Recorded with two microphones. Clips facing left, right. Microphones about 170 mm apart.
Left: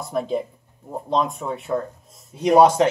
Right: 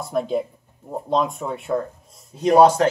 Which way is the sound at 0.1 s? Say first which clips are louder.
Right 1 dB; centre (ahead or behind).